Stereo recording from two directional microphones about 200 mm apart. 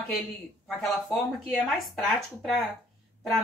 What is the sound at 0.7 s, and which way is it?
Speech, centre (ahead or behind).